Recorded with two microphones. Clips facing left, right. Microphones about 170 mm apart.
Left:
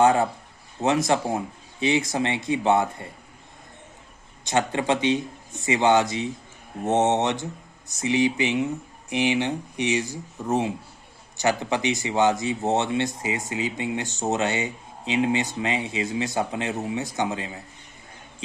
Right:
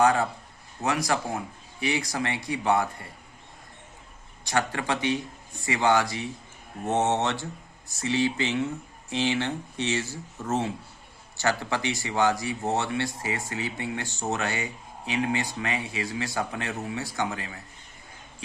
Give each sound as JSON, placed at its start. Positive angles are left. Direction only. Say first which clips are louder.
{"t": 0.0, "sound": "speech", "louder": "left 3 dB", "side_deg": 25}
{"t": 4.4, "sound": "speech", "louder": "left 4 dB", "side_deg": 20}